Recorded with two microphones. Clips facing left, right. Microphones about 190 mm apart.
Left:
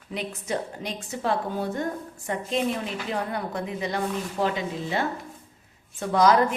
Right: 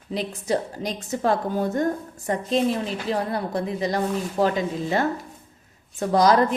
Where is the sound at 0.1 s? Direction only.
35° right (ahead or behind).